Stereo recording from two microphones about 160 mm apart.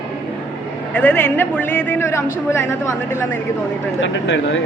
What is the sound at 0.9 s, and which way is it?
A man's voice, 10° left (ahead or behind).